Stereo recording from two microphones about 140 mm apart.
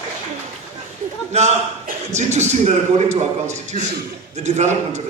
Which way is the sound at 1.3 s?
50° right (ahead or behind).